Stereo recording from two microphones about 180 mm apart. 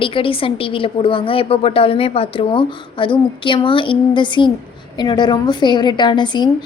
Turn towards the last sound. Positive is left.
turn(degrees=25)  # may be behind; listen again after turning